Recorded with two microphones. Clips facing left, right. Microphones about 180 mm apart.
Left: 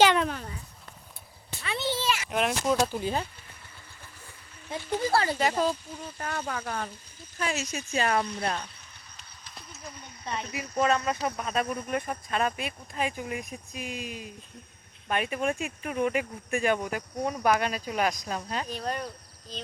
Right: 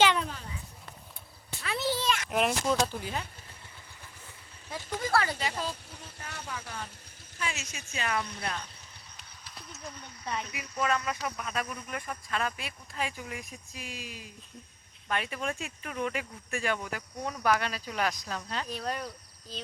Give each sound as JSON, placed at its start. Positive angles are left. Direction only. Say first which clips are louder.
{"t": 0.2, "sound": "dog", "louder": "left 6 dB", "side_deg": 60}
{"t": 1.6, "sound": "a sound", "louder": "left 1 dB", "side_deg": 0}
{"t": 3.0, "sound": "speech", "louder": "left 7 dB", "side_deg": 30}
{"t": 4.9, "sound": "speech", "louder": "left 3 dB", "side_deg": 30}
{"t": 5.4, "sound": "speech", "louder": "left 8 dB", "side_deg": 50}
{"t": 7.3, "sound": "speech", "louder": "left 7 dB", "side_deg": 40}
{"t": 9.1, "sound": "a sound", "louder": "left 1 dB", "side_deg": -5}
{"t": 10.4, "sound": "speech", "louder": "left 8 dB", "side_deg": 35}
{"t": 18.7, "sound": "speech", "louder": "even", "side_deg": 0}